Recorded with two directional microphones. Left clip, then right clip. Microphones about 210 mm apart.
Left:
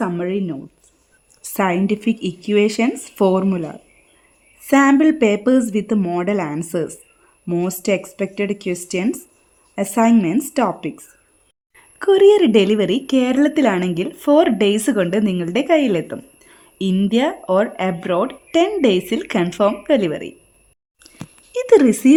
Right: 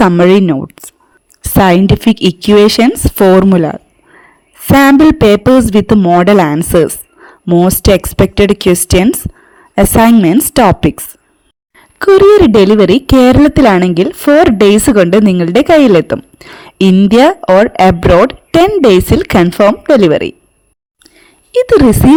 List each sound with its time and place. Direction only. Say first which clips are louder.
0.0 s speech: right 16 dB; 45° right (ahead or behind)
1.4 s speech: right 11 dB; 35° right (ahead or behind)
11.8 s a woman's voice: right 7 dB; 25° right (ahead or behind)
21.5 s speech: right 6 dB; 20° right (ahead or behind)